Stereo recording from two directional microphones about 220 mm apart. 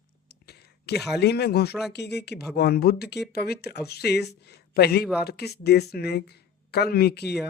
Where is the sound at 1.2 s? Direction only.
50° left (ahead or behind).